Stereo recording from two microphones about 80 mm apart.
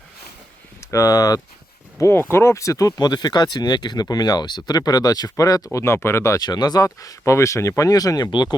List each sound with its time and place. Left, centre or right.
0.9 s speech: left
2.0 s speech: left
5.8 s speech: left
6.4 s speech: left